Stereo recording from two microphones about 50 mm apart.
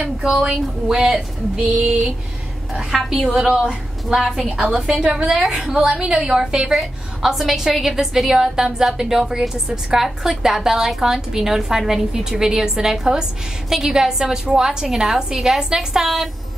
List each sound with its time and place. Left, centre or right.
0.8 s a woman's voice: centre
2.7 s a woman's voice: centre
5.0 s a woman's voice: centre
5.8 s a woman's voice: centre
6.7 s a woman's voice: centre